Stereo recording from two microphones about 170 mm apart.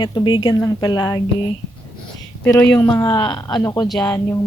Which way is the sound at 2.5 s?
10° left (ahead or behind).